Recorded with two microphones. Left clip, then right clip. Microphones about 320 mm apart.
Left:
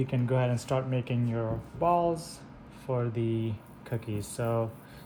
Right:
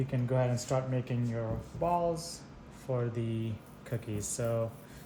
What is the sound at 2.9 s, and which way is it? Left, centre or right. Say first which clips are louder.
Speech: left 4 dB; centre.